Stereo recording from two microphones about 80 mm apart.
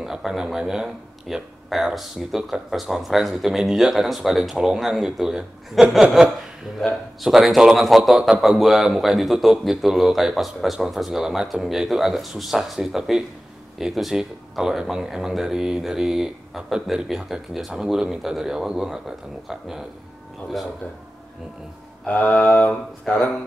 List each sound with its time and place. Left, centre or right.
0.0 s speech: centre
7.2 s speech: centre
22.0 s mantra: left
22.7 s speech: centre